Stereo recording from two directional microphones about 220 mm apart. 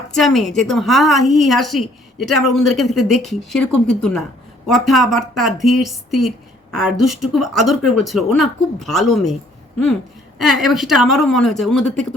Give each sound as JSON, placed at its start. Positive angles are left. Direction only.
{"t": 0.1, "sound": "a woman's voice", "side_deg": 0}
{"t": 10.3, "sound": "a woman's voice", "side_deg": 0}